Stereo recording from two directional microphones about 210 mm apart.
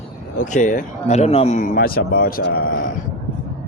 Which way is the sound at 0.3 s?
35° left (ahead or behind).